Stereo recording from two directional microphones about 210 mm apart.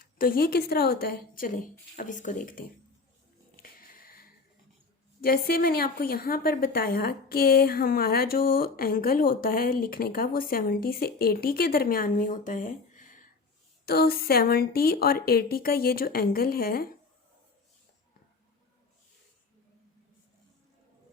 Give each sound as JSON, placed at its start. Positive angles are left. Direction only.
{"t": 0.0, "sound": "a woman's voice", "side_deg": 45}
{"t": 3.6, "sound": "a sound", "side_deg": 45}
{"t": 5.2, "sound": "a woman's voice", "side_deg": 45}